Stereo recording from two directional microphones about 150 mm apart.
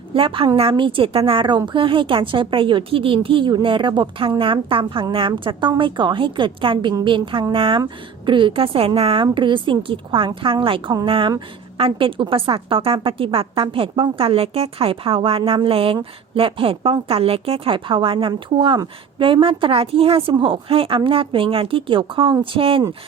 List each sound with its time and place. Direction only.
0.1 s a woman's voice: 35° right (ahead or behind)